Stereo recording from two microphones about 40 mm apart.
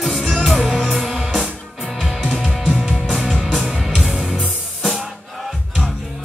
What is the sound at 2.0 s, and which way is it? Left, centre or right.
Music, centre.